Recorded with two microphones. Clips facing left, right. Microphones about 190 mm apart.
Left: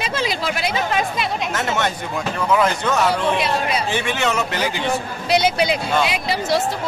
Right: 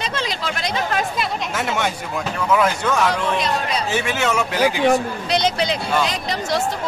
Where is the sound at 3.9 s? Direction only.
5° right (ahead or behind).